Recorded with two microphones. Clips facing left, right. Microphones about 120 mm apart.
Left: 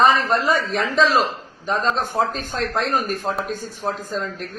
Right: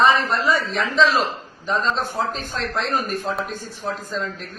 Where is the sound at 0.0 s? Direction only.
45° left (ahead or behind).